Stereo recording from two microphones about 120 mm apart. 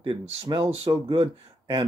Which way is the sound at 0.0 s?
45° right (ahead or behind).